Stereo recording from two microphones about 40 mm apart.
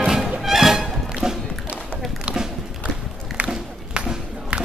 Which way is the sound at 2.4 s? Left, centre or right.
Centre.